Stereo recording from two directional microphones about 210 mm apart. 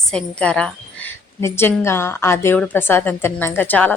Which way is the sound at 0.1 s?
5° left (ahead or behind).